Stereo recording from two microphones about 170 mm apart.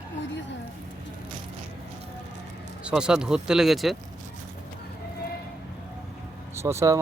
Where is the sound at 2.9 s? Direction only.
5° right (ahead or behind).